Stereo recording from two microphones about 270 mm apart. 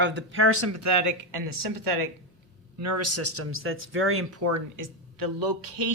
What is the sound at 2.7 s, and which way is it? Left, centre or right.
Speech, right.